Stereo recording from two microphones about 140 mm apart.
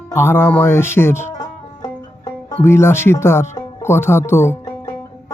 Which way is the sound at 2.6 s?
20° left (ahead or behind).